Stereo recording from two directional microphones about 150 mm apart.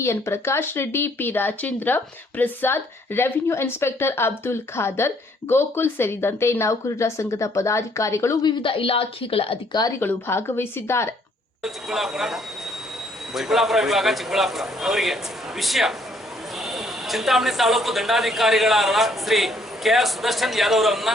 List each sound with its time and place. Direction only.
0.0 s a woman's voice: 20° left (ahead or behind); by 9.8 s 40° left (ahead or behind)
10.0 s a woman's voice: 15° left (ahead or behind)
11.6 s speech: centre (ahead or behind)